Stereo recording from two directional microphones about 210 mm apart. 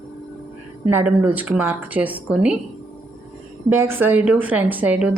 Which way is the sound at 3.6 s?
10° right (ahead or behind).